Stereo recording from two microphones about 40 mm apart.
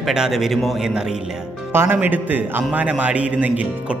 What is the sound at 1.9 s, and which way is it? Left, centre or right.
A man's voice, right.